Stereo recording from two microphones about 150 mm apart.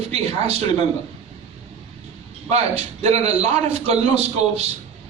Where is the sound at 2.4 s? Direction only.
45° right (ahead or behind).